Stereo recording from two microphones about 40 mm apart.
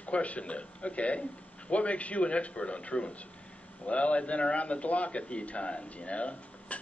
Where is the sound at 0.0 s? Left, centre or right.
Left.